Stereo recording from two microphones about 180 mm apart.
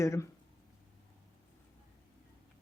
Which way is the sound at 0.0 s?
15° left (ahead or behind).